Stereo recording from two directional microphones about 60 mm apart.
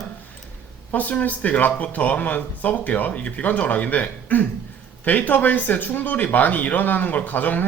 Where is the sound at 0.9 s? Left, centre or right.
Left.